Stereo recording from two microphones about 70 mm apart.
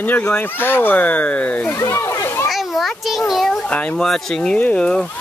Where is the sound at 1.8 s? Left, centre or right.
Left.